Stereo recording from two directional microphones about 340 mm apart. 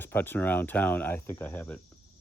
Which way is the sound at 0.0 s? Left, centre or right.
Centre.